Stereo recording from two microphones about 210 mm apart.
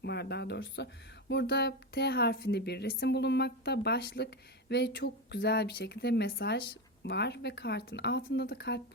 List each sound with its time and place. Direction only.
0.0 s speech: 50° left (ahead or behind)